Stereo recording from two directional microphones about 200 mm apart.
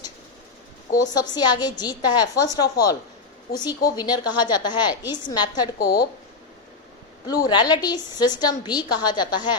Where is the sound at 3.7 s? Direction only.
20° left (ahead or behind).